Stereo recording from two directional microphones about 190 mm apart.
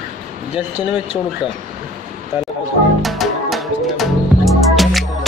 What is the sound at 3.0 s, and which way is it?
Music, centre (ahead or behind).